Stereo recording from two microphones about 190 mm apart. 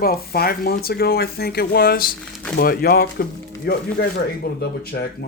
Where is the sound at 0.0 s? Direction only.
55° left (ahead or behind).